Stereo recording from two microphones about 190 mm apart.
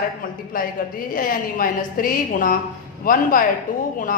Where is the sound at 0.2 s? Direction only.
50° left (ahead or behind).